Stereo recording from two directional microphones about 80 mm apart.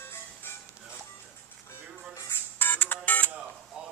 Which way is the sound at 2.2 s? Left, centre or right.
Left.